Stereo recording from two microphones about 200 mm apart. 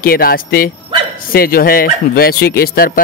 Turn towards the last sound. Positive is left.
turn(degrees=45)  # may be behind; listen again after turning